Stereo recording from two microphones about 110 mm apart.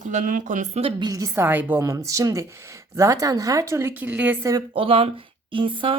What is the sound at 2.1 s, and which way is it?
A woman's voice, 30° right (ahead or behind).